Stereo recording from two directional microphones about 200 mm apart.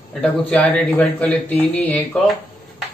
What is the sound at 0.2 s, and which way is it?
A man's voice, 5° left (ahead or behind).